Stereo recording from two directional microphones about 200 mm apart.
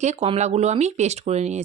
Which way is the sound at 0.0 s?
35° right (ahead or behind).